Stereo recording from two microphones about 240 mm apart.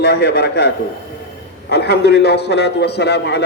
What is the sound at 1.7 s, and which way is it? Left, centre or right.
A man's voice, left.